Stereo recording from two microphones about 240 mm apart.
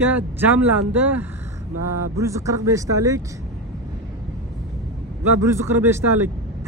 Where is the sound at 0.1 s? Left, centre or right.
Centre.